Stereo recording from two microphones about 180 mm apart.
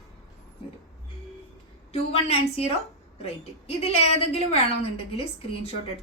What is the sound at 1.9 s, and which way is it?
A woman's voice, 35° left (ahead or behind).